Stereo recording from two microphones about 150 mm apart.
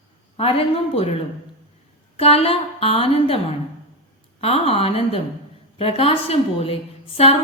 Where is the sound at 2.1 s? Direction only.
40° left (ahead or behind).